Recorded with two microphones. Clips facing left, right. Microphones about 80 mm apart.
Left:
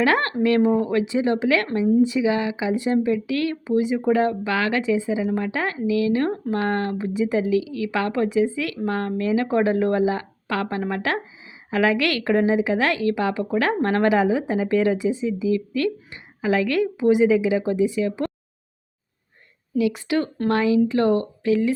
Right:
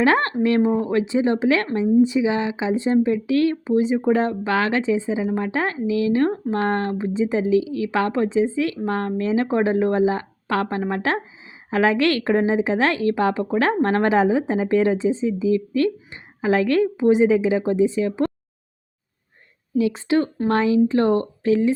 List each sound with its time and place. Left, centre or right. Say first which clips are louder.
0.0 s speech: right 1 dB; right
19.7 s speech: right 2 dB; right